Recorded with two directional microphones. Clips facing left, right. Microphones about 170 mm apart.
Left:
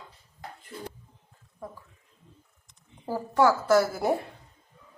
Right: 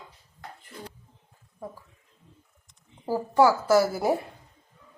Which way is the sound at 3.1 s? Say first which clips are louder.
Right 2 dB; 10° right (ahead or behind).